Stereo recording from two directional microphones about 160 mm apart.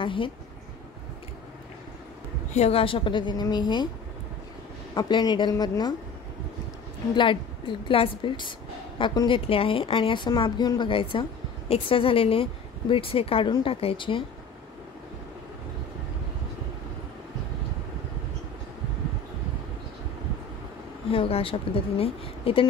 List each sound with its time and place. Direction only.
0.0 s speech: 30° left (ahead or behind)
2.5 s a woman's voice: 40° left (ahead or behind)
4.9 s a woman's voice: 25° left (ahead or behind)
7.2 s a woman's voice: 30° left (ahead or behind)
21.1 s a woman's voice: 35° left (ahead or behind)